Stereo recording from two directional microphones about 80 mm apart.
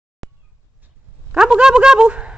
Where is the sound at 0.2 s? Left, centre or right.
Centre.